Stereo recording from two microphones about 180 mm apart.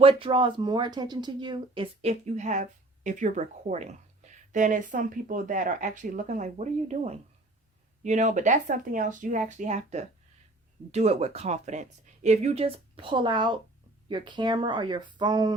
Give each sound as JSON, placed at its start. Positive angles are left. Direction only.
{"t": 0.0, "sound": "speech", "side_deg": -30}